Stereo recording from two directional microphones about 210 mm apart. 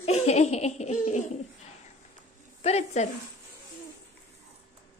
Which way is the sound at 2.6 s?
30° left (ahead or behind).